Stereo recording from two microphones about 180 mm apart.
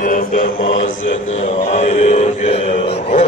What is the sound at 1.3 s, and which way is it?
Mantra, 35° left (ahead or behind).